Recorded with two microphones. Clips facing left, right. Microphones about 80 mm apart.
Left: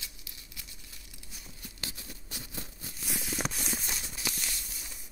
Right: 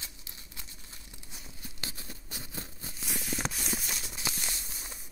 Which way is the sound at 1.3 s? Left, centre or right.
Right.